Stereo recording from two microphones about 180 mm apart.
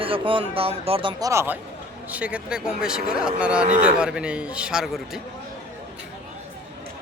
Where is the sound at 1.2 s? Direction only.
15° right (ahead or behind).